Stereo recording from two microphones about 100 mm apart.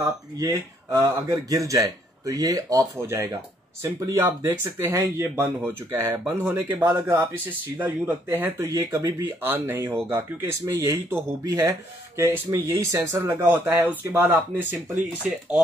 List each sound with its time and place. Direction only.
0.0 s speech: 40° right (ahead or behind); by 15.3 s 20° right (ahead or behind)